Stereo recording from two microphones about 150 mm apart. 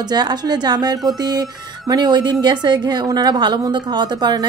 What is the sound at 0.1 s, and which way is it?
A woman's voice, 25° right (ahead or behind).